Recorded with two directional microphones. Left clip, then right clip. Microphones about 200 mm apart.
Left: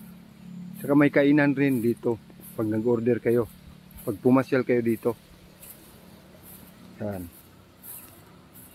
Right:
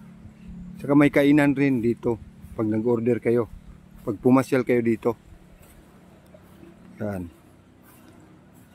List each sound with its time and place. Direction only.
0.8 s speech: 25° right (ahead or behind)
7.0 s speech: 25° right (ahead or behind)